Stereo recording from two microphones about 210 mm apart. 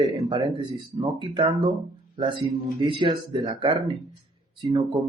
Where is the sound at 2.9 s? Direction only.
20° right (ahead or behind).